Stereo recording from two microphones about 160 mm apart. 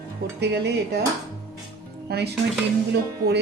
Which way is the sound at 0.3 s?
90° right.